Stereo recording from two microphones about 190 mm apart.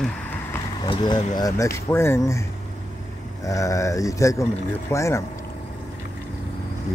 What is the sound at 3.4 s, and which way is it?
Speech, 15° left (ahead or behind).